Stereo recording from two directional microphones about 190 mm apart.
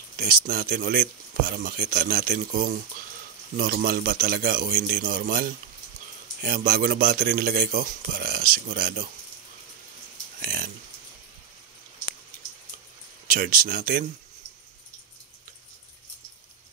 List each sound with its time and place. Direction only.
0.2 s speech: 50° right (ahead or behind)
10.4 s a sound: 50° right (ahead or behind)
13.3 s speech: 50° right (ahead or behind)